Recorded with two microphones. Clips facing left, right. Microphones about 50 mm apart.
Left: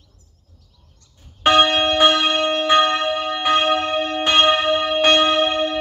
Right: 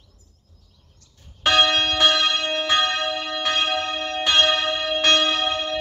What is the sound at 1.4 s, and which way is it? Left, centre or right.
Church bell, centre.